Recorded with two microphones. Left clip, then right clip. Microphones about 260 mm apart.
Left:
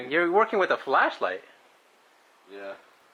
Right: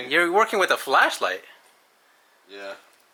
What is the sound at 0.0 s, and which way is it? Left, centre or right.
Speech, centre.